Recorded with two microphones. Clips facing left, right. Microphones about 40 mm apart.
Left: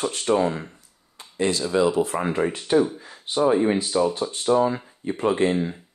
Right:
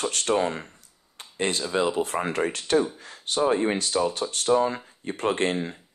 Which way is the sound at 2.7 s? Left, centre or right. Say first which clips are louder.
Left 3 dB; right.